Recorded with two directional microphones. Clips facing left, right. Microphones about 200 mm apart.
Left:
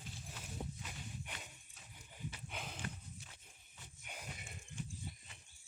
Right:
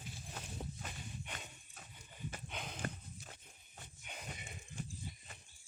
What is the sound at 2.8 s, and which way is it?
Horse, 45° right (ahead or behind).